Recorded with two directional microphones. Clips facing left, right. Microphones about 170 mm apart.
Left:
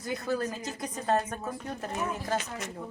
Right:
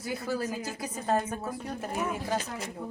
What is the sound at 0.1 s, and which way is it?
Speech, 10° right (ahead or behind).